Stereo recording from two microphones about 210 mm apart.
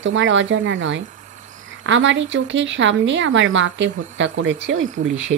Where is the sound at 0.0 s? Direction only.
65° right (ahead or behind).